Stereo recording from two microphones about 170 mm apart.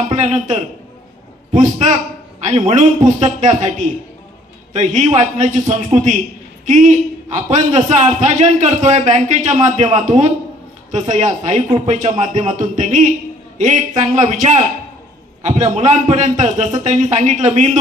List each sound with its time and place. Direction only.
0.1 s a man's voice: 40° right (ahead or behind)